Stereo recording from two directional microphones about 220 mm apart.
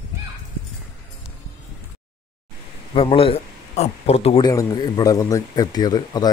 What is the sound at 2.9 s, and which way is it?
Speech, 25° left (ahead or behind).